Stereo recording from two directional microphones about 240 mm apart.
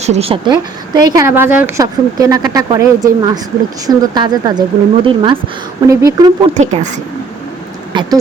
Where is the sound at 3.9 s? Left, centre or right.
Centre.